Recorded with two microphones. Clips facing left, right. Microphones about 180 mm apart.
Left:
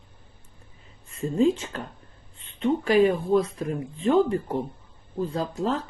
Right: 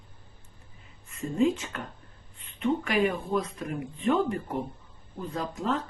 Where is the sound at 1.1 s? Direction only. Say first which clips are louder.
Left 3 dB; 30° left (ahead or behind).